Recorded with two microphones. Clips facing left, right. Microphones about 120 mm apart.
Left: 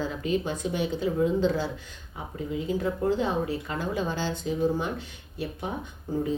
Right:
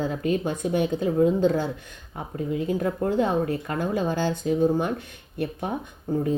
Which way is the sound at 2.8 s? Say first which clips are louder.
Right 1 dB; 50° right (ahead or behind).